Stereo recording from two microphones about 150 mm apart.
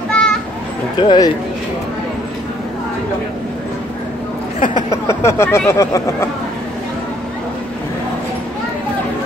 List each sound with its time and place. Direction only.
0.1 s children playing: 5° left (ahead or behind)
0.9 s speech: 25° left (ahead or behind)
5.0 s speech: 20° left (ahead or behind)